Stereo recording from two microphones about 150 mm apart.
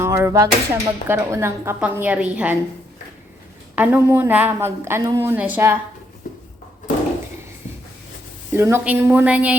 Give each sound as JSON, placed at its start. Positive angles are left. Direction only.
{"t": 0.0, "sound": "speech", "side_deg": -20}
{"t": 3.8, "sound": "speech", "side_deg": -15}
{"t": 8.5, "sound": "speech", "side_deg": -15}